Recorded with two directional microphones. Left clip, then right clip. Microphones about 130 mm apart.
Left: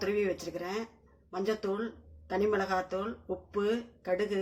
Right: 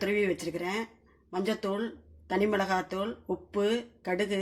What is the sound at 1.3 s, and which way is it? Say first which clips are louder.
Speech: right 1 dB; 75° right (ahead or behind).